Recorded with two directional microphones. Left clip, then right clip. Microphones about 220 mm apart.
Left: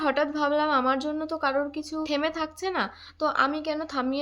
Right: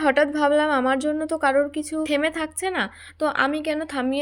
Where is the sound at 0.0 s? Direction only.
20° right (ahead or behind).